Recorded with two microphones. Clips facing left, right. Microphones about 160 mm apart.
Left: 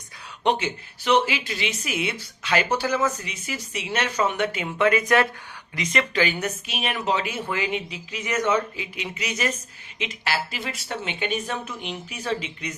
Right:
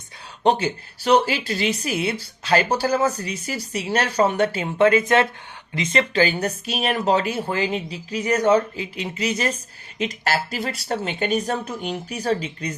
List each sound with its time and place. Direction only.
0.4 s speech: 35° right (ahead or behind)